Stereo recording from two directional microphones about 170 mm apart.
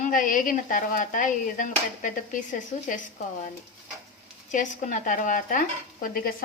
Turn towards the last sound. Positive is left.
turn(degrees=50)  # may be behind; listen again after turning